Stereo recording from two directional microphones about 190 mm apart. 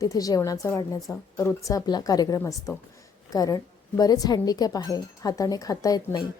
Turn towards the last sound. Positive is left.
turn(degrees=20)  # may be behind; listen again after turning